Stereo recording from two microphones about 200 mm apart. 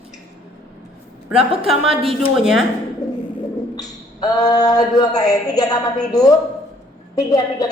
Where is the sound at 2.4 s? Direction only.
Centre (ahead or behind).